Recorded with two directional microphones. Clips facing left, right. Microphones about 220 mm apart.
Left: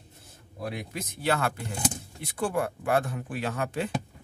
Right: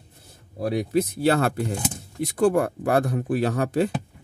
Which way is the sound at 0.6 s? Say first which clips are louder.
Right 12 dB; 35° right (ahead or behind).